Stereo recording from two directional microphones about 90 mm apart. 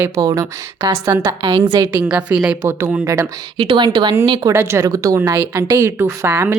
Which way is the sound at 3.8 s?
50° right (ahead or behind).